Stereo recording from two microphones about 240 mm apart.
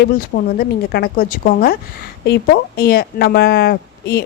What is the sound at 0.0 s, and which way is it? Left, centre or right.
A woman's voice, left.